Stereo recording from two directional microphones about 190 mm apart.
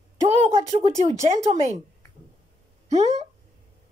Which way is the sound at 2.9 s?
35° right (ahead or behind).